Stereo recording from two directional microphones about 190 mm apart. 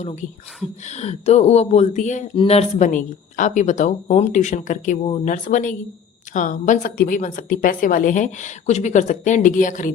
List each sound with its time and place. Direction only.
0.0 s speech: 35° left (ahead or behind)